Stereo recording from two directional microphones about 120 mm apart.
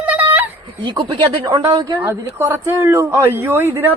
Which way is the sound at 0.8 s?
40° right (ahead or behind).